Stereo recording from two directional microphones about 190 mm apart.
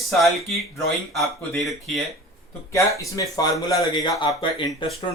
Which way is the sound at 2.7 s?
15° left (ahead or behind).